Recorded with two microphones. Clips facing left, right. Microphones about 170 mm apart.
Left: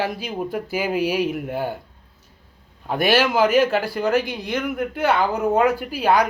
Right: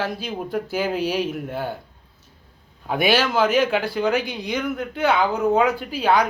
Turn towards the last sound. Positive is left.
turn(degrees=10)  # may be behind; listen again after turning